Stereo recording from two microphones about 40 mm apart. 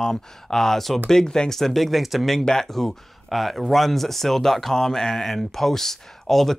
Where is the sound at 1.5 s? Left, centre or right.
Centre.